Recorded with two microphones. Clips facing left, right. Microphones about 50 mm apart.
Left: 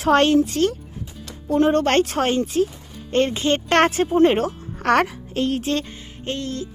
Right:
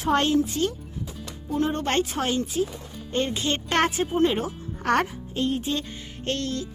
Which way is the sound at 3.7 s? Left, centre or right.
Left.